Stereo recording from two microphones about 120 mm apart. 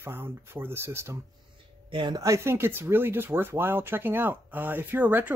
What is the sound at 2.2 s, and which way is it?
Speech, 25° right (ahead or behind).